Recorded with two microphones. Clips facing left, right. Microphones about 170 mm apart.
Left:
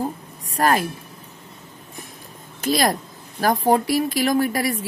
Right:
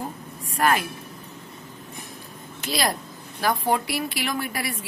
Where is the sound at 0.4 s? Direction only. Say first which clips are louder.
Left 3 dB; 35° left (ahead or behind).